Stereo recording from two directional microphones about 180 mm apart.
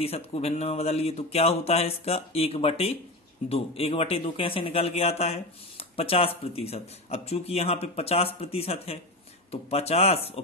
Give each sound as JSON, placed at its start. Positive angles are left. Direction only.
{"t": 0.0, "sound": "a man's voice", "side_deg": 35}